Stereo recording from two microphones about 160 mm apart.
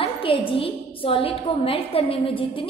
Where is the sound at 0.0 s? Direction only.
35° left (ahead or behind).